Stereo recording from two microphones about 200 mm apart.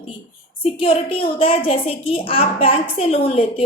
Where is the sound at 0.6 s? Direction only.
30° left (ahead or behind).